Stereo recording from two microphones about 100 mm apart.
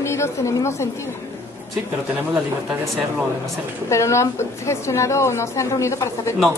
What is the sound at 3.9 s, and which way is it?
A woman's voice, 30° left (ahead or behind).